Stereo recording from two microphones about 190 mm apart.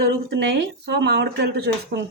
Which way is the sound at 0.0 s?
60° right (ahead or behind).